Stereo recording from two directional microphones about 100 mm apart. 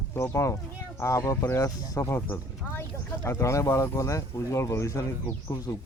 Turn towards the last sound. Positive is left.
turn(degrees=30)  # may be behind; listen again after turning